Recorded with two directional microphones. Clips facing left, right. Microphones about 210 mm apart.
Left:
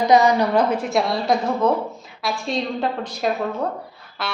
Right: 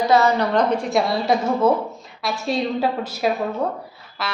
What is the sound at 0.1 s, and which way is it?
A woman's voice, 15° left (ahead or behind).